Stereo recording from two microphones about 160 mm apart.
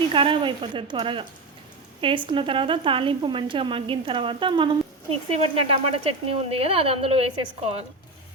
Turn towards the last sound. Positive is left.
turn(degrees=-40)  # may be behind; listen again after turning